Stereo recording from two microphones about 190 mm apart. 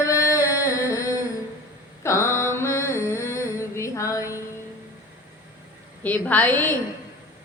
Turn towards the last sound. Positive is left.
turn(degrees=10)  # may be behind; listen again after turning